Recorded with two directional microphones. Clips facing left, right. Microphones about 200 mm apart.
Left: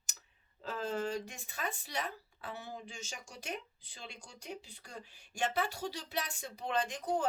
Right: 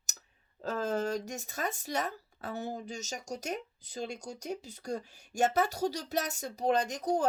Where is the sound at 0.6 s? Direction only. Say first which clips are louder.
Right 5 dB; 40° right (ahead or behind).